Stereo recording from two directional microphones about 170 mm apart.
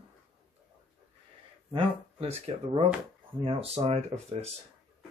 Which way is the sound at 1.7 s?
35° right (ahead or behind).